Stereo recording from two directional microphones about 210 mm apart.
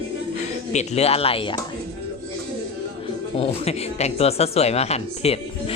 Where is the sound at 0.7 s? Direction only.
30° left (ahead or behind).